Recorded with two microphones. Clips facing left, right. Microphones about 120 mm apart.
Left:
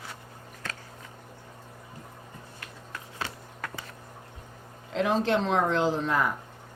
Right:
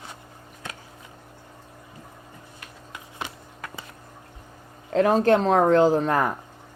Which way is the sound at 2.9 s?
15° right (ahead or behind).